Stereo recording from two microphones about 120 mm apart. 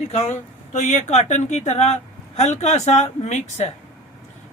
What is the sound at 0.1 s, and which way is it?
Speech, 70° left (ahead or behind).